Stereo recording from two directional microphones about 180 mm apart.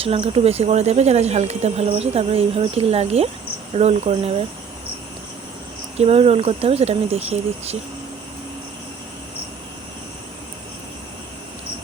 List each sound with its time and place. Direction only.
0.0 s speech: 30° right (ahead or behind)
6.0 s speech: 35° right (ahead or behind)